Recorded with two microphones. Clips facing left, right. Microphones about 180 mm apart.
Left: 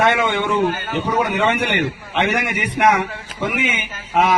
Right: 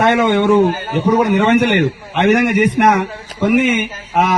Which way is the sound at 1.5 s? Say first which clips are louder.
Right 8 dB; 50° right (ahead or behind).